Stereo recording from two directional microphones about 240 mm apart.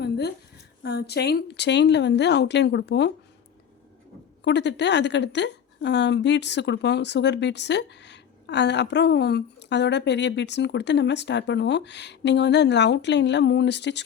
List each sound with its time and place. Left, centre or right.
0.0 s a sound: left
0.8 s a woman's voice: left
4.4 s a woman's voice: left